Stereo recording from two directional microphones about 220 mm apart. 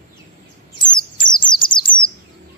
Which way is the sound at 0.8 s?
20° left (ahead or behind).